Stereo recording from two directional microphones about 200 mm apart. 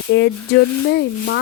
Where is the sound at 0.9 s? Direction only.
55° left (ahead or behind).